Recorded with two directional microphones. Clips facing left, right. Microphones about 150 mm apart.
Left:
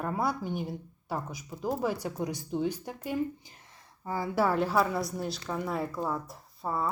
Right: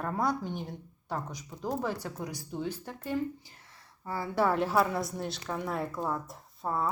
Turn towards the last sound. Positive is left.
turn(degrees=0)  # may be behind; listen again after turning